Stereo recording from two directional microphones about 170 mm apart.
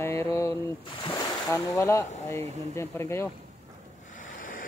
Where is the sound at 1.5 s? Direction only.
15° left (ahead or behind).